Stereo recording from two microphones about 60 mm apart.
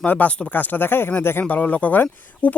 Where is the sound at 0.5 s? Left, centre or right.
Left.